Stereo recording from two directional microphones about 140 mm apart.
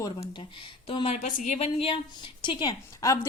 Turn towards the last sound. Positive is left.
turn(degrees=25)  # may be behind; listen again after turning